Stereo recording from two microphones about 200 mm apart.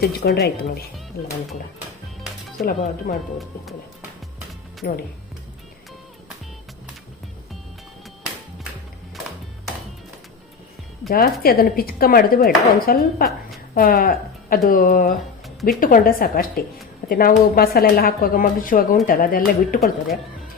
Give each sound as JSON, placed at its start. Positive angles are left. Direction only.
{"t": 0.0, "sound": "speech", "side_deg": 50}
{"t": 2.6, "sound": "speech", "side_deg": 45}
{"t": 4.8, "sound": "speech", "side_deg": 55}
{"t": 11.1, "sound": "speech", "side_deg": 50}